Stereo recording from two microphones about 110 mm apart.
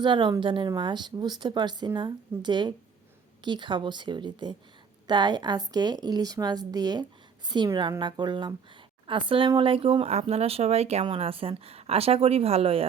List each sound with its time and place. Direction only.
0.0 s a woman's voice: 45° right (ahead or behind); by 11.0 s 75° right (ahead or behind)
11.0 s a woman's voice: 55° right (ahead or behind)